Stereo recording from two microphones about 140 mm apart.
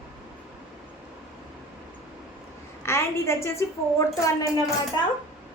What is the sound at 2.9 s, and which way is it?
A woman's voice, 20° left (ahead or behind).